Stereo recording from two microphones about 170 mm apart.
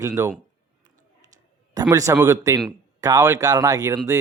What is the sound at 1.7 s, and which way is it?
A man's voice, 20° right (ahead or behind).